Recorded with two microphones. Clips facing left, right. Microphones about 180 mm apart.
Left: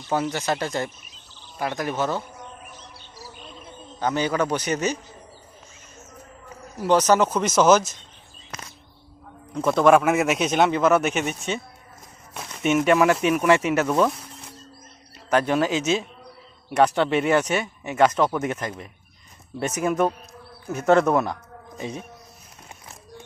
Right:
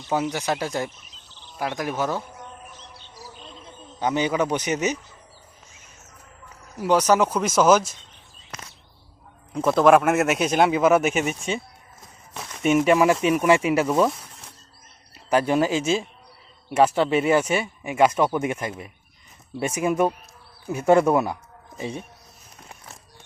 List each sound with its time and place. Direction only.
0.1 s speech: 10° right (ahead or behind)
4.0 s a man's voice: 15° right (ahead or behind)
6.8 s speech: 10° right (ahead or behind)
9.6 s speech: 5° right (ahead or behind)
12.3 s a sound: 5° left (ahead or behind)
12.7 s speech: 5° right (ahead or behind)
15.3 s speech: 5° right (ahead or behind)